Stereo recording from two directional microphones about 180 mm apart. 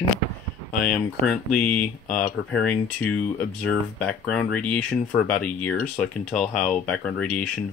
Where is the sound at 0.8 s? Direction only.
5° left (ahead or behind).